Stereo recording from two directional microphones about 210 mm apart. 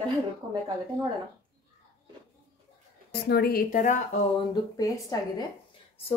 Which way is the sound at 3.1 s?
50° left (ahead or behind).